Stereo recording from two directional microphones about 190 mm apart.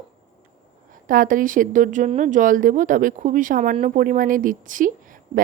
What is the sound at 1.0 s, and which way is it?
A woman's voice, 45° right (ahead or behind).